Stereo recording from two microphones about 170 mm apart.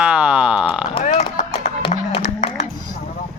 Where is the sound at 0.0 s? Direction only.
10° right (ahead or behind).